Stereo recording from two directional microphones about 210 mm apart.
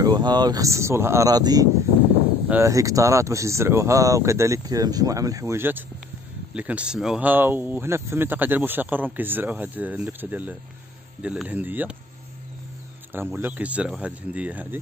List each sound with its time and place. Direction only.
0.0 s speech: 20° right (ahead or behind)
13.1 s speech: 10° right (ahead or behind)